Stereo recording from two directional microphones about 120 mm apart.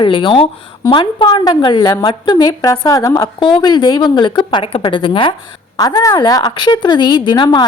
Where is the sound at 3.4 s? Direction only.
40° left (ahead or behind).